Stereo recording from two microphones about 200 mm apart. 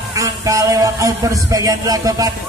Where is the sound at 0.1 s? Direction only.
15° right (ahead or behind).